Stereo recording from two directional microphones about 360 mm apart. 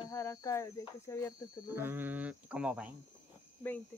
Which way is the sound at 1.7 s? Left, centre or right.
Centre.